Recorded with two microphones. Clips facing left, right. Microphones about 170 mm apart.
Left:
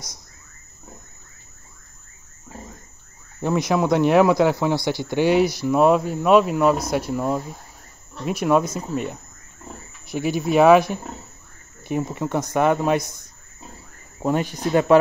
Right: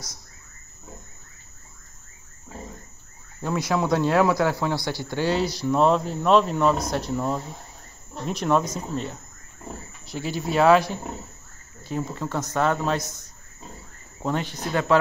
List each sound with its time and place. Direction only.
3.3 s speech: 20° left (ahead or behind)
14.2 s speech: 15° left (ahead or behind)